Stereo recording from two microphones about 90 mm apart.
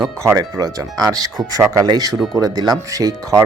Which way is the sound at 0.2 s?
35° right (ahead or behind).